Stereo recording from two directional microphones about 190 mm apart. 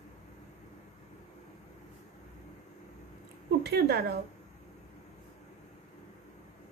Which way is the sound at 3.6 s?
60° right (ahead or behind).